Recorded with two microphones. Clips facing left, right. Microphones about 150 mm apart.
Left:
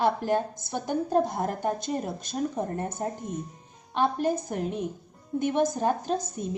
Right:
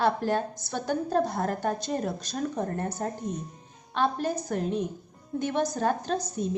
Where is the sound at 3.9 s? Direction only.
15° left (ahead or behind).